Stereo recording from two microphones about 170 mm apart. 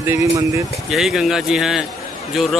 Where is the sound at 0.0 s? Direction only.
15° right (ahead or behind).